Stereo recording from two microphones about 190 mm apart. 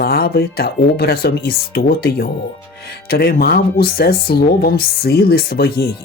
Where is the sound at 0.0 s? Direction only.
55° left (ahead or behind).